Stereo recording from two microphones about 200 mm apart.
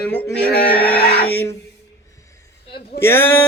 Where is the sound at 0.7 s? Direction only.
25° left (ahead or behind).